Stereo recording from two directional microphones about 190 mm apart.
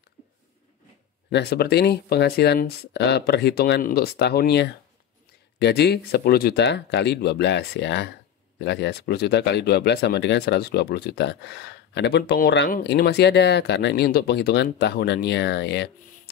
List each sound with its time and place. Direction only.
1.3 s speech: 60° left (ahead or behind)